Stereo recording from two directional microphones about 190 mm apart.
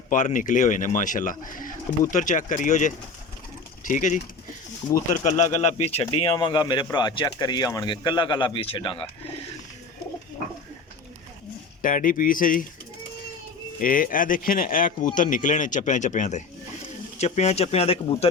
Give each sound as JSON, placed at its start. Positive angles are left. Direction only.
{"t": 0.1, "sound": "speech", "side_deg": 40}
{"t": 11.8, "sound": "speech", "side_deg": 45}
{"t": 13.7, "sound": "speech", "side_deg": 45}